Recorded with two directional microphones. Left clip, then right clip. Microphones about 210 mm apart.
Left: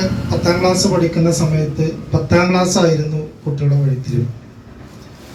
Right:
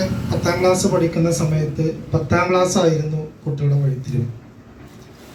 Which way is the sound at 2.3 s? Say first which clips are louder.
Left 2 dB; 30° right (ahead or behind).